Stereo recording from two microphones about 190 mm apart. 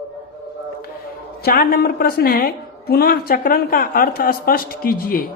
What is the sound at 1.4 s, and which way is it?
A woman's voice, 50° left (ahead or behind).